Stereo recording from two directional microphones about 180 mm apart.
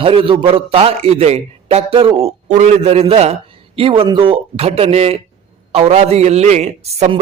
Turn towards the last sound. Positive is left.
turn(degrees=-35)  # may be behind; listen again after turning